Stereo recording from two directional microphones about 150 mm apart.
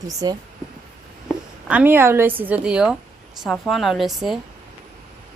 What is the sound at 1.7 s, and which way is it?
A woman's voice, 10° right (ahead or behind).